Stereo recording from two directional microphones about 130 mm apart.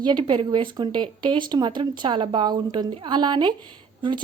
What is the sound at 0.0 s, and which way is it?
Speech, 35° right (ahead or behind).